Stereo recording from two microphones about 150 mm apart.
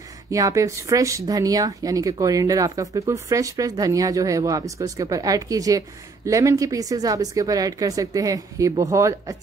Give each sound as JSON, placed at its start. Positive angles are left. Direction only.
{"t": 0.3, "sound": "speech", "side_deg": -20}